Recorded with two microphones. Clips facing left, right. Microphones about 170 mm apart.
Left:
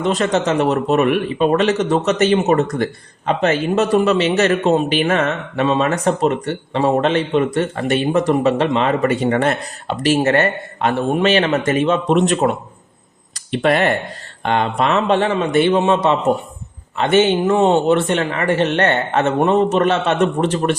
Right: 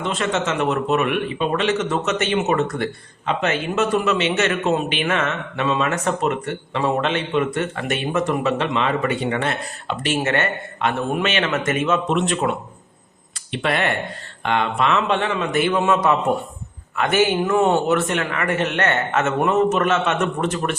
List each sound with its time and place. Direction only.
0.0 s speech: 40° left (ahead or behind)